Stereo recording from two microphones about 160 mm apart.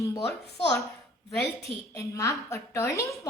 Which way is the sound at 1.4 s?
20° left (ahead or behind).